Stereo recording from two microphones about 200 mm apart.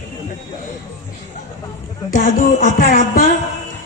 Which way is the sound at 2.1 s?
40° left (ahead or behind).